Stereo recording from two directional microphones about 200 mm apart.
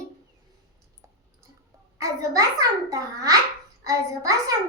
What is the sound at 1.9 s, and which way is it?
Child singing, 15° right (ahead or behind).